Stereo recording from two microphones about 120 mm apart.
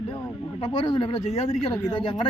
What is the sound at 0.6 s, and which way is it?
Speech, 45° left (ahead or behind).